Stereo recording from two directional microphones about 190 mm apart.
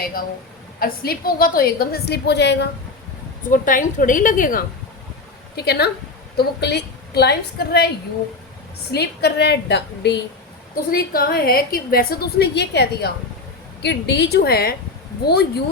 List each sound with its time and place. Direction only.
0.8 s a woman's voice: 50° left (ahead or behind)
3.5 s a woman's voice: 45° left (ahead or behind)
5.5 s a woman's voice: 55° left (ahead or behind)
8.9 s a woman's voice: 60° left (ahead or behind)
10.9 s a woman's voice: 50° left (ahead or behind)